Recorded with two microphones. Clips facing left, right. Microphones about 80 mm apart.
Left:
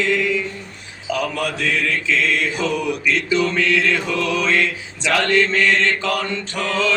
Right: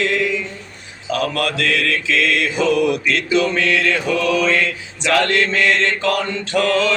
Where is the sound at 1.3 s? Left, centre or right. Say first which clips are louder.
Right 2 dB; right.